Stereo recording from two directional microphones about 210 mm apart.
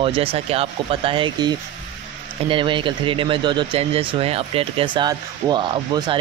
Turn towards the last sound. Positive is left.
turn(degrees=-20)  # may be behind; listen again after turning